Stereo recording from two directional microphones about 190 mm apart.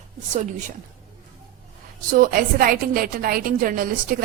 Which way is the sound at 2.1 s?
45° right (ahead or behind).